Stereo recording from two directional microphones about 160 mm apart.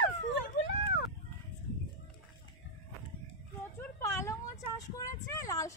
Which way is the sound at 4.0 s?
15° left (ahead or behind).